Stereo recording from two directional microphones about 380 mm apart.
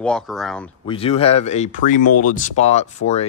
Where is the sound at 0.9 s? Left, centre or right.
Centre.